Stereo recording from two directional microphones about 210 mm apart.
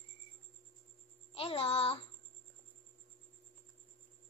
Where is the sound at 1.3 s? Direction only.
25° left (ahead or behind).